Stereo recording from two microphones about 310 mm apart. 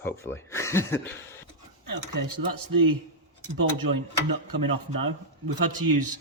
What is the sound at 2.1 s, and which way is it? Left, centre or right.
Speech, right.